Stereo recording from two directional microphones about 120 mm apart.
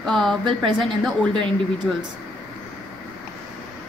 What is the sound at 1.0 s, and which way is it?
Speech, 5° left (ahead or behind).